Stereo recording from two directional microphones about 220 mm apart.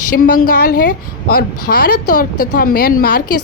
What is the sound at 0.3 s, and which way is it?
A woman's voice, 40° left (ahead or behind).